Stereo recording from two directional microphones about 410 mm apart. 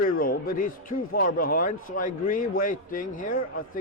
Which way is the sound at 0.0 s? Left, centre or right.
Left.